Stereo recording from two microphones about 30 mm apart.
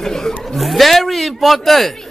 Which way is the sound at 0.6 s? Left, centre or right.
Centre.